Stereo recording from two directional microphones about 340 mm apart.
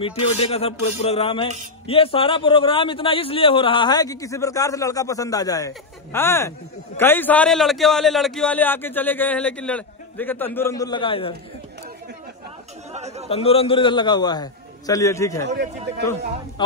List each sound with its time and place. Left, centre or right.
0.0 s a man's voice: centre
12.9 s chatter: centre
13.3 s a man's voice: centre
15.4 s speech: right